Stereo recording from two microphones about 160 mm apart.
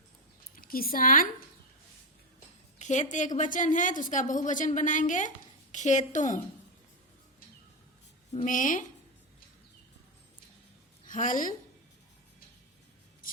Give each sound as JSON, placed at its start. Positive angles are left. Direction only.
{"t": 0.5, "sound": "a woman's voice", "side_deg": 65}
{"t": 2.7, "sound": "a woman's voice", "side_deg": 45}
{"t": 8.4, "sound": "a woman's voice", "side_deg": 55}
{"t": 11.1, "sound": "a woman's voice", "side_deg": 55}